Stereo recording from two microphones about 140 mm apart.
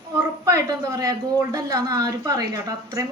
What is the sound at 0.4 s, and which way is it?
A woman's voice, 25° right (ahead or behind).